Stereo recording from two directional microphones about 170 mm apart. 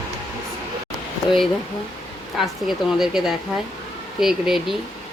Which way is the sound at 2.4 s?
Centre (ahead or behind).